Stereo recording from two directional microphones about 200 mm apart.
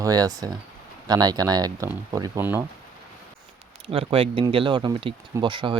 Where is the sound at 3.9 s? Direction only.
25° right (ahead or behind).